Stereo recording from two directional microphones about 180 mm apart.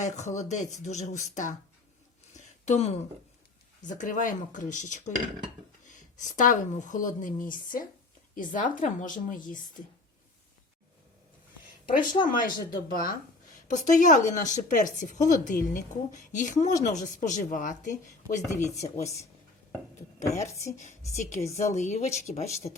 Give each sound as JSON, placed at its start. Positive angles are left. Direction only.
{"t": 0.0, "sound": "speech", "side_deg": 40}
{"t": 2.6, "sound": "speech", "side_deg": 35}
{"t": 11.9, "sound": "speech", "side_deg": 50}
{"t": 13.7, "sound": "speech", "side_deg": 45}
{"t": 20.3, "sound": "speech", "side_deg": 40}